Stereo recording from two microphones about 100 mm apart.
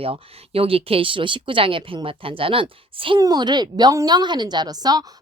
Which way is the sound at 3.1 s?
40° right (ahead or behind).